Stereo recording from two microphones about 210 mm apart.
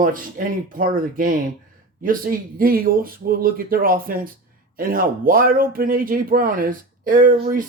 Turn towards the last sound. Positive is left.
turn(degrees=-40)  # may be behind; listen again after turning